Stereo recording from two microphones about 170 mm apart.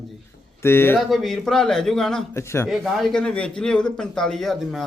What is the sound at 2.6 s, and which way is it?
A man's voice, centre (ahead or behind).